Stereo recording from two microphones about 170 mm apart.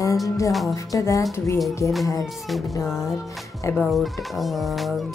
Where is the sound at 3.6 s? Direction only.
15° left (ahead or behind).